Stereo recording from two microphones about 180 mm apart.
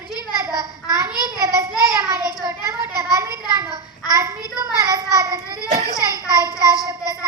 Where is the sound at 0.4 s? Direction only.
20° right (ahead or behind).